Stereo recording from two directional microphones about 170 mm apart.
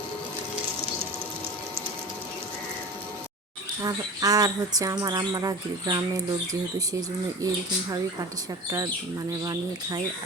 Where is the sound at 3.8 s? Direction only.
20° right (ahead or behind).